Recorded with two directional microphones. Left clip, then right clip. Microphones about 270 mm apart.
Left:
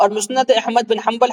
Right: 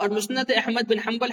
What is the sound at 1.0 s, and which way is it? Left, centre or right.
Speech, left.